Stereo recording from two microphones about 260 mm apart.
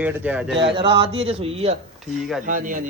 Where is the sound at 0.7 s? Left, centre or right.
Right.